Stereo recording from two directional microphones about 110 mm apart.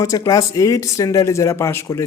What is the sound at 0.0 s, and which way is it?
A man's voice, 30° left (ahead or behind).